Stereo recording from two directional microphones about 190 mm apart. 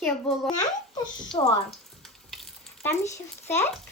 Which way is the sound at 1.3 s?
25° left (ahead or behind).